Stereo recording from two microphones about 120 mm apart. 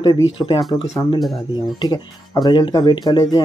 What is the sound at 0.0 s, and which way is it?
Speech, 40° left (ahead or behind).